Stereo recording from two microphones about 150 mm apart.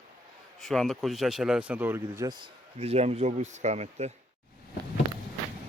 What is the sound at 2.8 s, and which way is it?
Speech, 45° right (ahead or behind).